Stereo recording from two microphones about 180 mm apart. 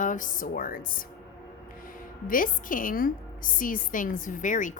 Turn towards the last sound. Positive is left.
turn(degrees=45)  # may be behind; listen again after turning